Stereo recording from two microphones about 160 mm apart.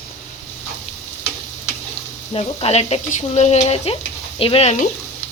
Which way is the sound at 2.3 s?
40° left (ahead or behind).